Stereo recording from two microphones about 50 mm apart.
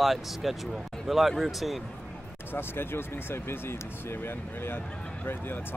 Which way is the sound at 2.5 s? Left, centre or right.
Left.